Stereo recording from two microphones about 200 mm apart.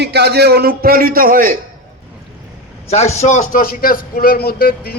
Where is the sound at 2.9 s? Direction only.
35° left (ahead or behind); by 4.9 s 50° left (ahead or behind).